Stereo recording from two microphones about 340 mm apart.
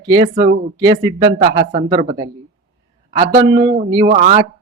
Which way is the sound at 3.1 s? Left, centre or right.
Centre.